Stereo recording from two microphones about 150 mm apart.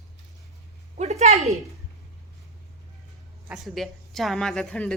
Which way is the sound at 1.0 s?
45° right (ahead or behind).